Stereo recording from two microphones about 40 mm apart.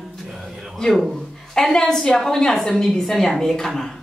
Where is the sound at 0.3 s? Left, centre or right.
Centre.